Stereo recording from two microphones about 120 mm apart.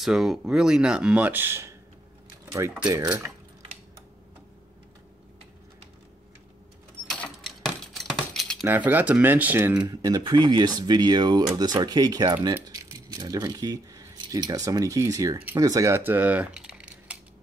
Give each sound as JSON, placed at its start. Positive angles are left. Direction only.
{"t": 0.0, "sound": "speech", "side_deg": -5}
{"t": 7.1, "sound": "mechanisms", "side_deg": 5}
{"t": 8.6, "sound": "speech", "side_deg": -15}
{"t": 9.8, "sound": "speech", "side_deg": -30}